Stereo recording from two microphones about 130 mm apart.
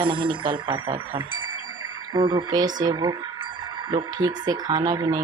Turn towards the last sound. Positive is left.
turn(degrees=-30)  # may be behind; listen again after turning